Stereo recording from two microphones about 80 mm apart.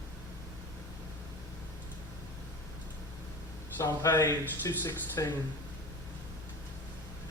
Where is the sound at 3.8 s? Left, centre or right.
Left.